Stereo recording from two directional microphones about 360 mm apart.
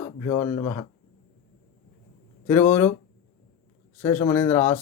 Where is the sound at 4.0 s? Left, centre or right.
Centre.